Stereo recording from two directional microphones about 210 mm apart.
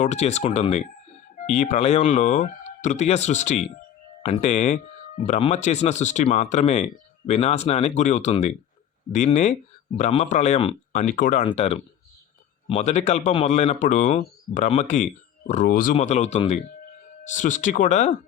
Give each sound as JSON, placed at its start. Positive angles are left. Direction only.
{"t": 0.0, "sound": "speech", "side_deg": 30}